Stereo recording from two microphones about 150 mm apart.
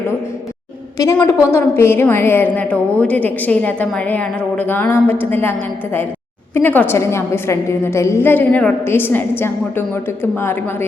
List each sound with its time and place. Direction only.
0.9 s a woman's voice: 25° left (ahead or behind)